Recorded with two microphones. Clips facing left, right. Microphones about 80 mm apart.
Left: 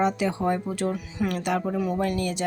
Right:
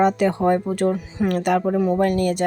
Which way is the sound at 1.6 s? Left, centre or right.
Right.